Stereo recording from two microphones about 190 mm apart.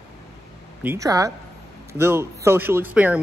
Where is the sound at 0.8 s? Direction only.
15° right (ahead or behind).